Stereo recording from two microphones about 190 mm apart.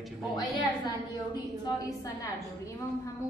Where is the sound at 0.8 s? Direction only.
20° left (ahead or behind).